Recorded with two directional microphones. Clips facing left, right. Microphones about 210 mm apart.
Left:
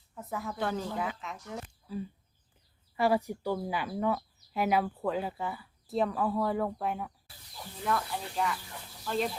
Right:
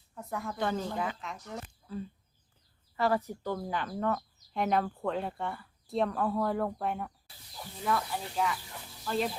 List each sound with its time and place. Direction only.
0.1 s speech: centre (ahead or behind)